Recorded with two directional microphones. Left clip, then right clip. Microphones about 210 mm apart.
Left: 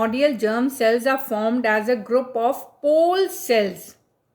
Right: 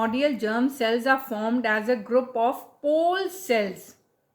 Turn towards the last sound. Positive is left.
turn(degrees=35)  # may be behind; listen again after turning